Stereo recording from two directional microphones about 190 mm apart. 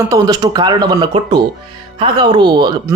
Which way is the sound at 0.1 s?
20° right (ahead or behind).